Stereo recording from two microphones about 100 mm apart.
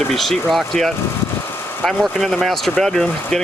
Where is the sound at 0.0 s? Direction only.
Centre (ahead or behind).